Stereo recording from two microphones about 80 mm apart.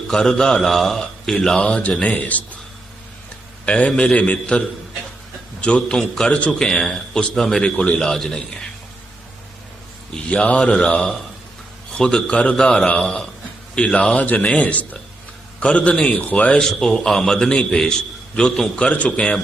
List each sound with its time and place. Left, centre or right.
0.1 s a man's voice: centre
3.7 s a man's voice: centre
10.2 s a man's voice: centre